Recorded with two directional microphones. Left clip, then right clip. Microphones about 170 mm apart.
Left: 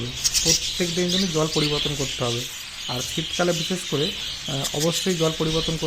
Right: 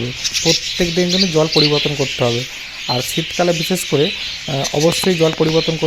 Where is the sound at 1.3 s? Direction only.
30° right (ahead or behind).